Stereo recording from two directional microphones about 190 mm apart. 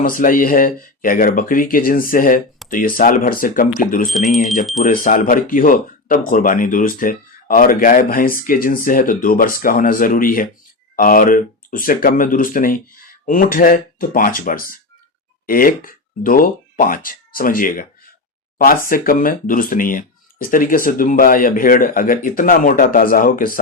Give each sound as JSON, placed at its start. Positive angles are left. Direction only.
{"t": 0.0, "sound": "speech", "side_deg": 45}
{"t": 18.9, "sound": "speech", "side_deg": 50}